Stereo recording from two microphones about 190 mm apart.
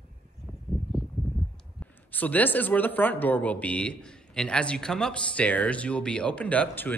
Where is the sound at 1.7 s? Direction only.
10° left (ahead or behind).